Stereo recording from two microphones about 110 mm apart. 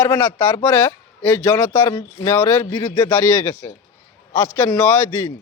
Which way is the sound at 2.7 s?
40° left (ahead or behind).